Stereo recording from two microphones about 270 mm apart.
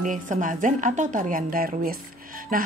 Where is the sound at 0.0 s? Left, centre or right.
Right.